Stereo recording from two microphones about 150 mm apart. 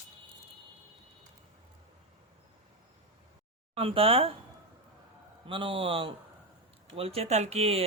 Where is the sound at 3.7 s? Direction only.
40° right (ahead or behind).